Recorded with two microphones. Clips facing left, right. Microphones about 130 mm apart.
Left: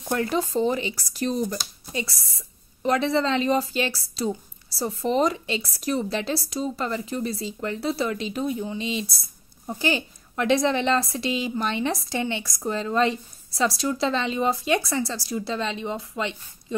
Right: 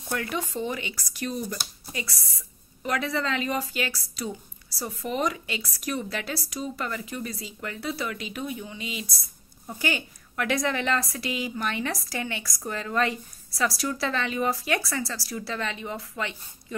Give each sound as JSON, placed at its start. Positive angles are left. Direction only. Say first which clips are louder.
{"t": 0.1, "sound": "speech", "louder": "left 6 dB", "side_deg": 30}
{"t": 1.9, "sound": "a woman's voice", "louder": "left 6 dB", "side_deg": 25}